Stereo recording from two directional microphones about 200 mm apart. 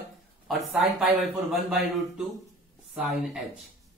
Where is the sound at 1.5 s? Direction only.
Centre (ahead or behind).